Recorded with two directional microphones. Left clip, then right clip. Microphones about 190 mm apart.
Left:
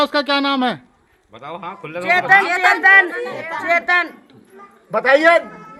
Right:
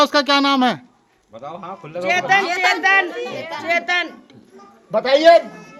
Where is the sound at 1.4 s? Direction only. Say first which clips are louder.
Left 2 dB; 45° left (ahead or behind).